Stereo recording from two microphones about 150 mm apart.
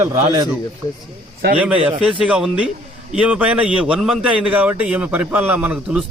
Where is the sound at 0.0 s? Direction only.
20° right (ahead or behind).